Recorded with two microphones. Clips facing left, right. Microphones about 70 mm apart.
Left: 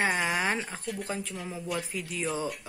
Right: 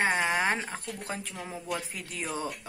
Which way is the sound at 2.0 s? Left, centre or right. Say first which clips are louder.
Left 4 dB; right.